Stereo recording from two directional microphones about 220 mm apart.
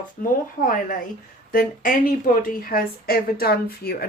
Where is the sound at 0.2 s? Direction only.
40° left (ahead or behind).